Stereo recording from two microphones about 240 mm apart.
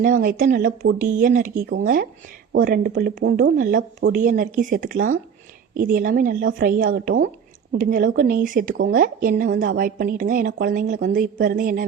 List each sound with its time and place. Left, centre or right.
0.0 s a woman's voice: right